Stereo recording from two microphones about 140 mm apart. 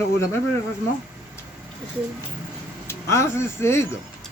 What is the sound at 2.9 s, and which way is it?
Speech, 20° left (ahead or behind).